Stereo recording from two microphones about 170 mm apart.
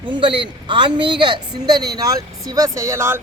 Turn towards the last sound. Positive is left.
turn(degrees=-15)  # may be behind; listen again after turning